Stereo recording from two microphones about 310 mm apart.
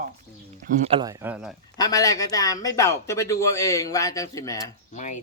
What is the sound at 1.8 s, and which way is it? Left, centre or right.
Speech, centre.